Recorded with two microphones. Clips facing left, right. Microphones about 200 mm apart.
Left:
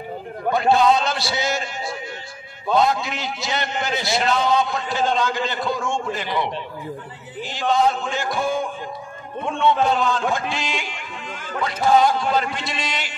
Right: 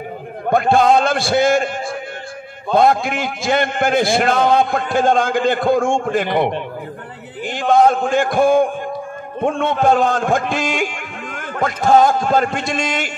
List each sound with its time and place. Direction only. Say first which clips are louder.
0.5 s a man's voice: right 3 dB; 50° right (ahead or behind)
2.7 s a man's voice: right 5 dB; 50° right (ahead or behind)